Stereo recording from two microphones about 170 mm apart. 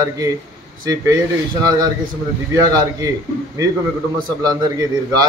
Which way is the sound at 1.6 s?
25° right (ahead or behind).